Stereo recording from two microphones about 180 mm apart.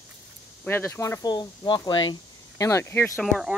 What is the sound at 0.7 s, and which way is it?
Speech, 15° left (ahead or behind).